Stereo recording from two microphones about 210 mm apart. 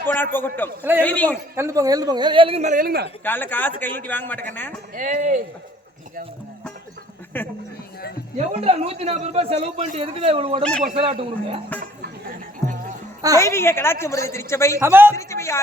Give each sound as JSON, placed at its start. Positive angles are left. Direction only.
{"t": 0.3, "sound": "a woman's voice", "side_deg": 10}
{"t": 1.5, "sound": "a man's voice", "side_deg": -15}
{"t": 3.2, "sound": "a woman's voice", "side_deg": 10}
{"t": 4.9, "sound": "speech", "side_deg": -40}
{"t": 7.3, "sound": "a woman's voice", "side_deg": 10}
{"t": 8.4, "sound": "a man's voice", "side_deg": -30}
{"t": 10.6, "sound": "speech", "side_deg": 5}
{"t": 10.9, "sound": "a man's voice", "side_deg": -25}
{"t": 11.8, "sound": "music", "side_deg": -40}
{"t": 13.4, "sound": "a woman's voice", "side_deg": 10}
{"t": 14.8, "sound": "a man's voice", "side_deg": -10}
{"t": 15.1, "sound": "a woman's voice", "side_deg": 15}